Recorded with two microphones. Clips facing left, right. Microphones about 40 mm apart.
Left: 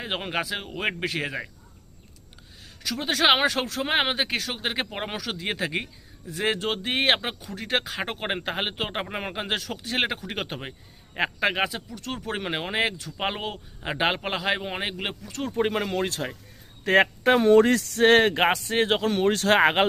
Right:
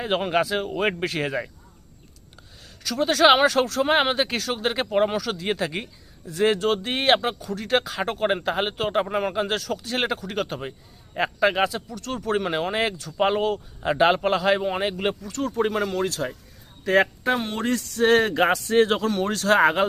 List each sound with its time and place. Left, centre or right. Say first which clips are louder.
0.0 s speech: right 6 dB; centre
2.8 s speech: right 5 dB; centre
16.8 s speech: even; left
17.2 s speech: left 7 dB; left
18.0 s speech: even; left
18.5 s speech: right 4 dB; centre; by 19.9 s left